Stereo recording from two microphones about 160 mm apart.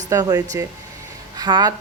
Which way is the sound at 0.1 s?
25° right (ahead or behind).